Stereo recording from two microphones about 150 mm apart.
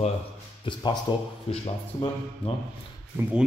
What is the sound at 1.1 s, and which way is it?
Speech, 30° left (ahead or behind).